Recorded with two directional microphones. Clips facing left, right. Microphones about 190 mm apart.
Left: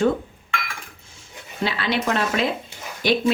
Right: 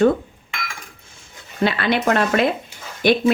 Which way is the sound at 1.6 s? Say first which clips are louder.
Right 5 dB; 55° right (ahead or behind).